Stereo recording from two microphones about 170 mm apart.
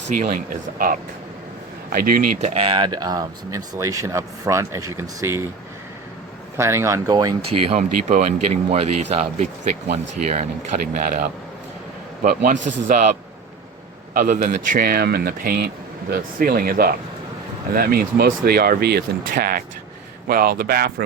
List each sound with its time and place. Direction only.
0.2 s speech: 55° right (ahead or behind)
2.4 s speech: 35° right (ahead or behind); by 5.4 s 15° right (ahead or behind)
6.6 s speech: 15° right (ahead or behind)
7.7 s speech: 45° right (ahead or behind)
10.7 s speech: 55° right (ahead or behind)
14.1 s speech: 60° right (ahead or behind)